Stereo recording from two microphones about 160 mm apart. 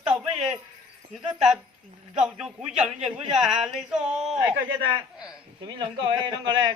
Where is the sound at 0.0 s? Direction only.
5° right (ahead or behind).